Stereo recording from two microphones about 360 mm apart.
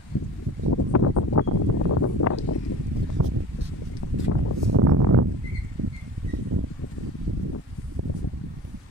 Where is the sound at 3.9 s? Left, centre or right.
Left.